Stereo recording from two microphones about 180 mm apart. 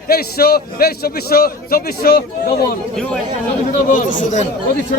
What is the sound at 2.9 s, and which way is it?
Speech, 5° left (ahead or behind).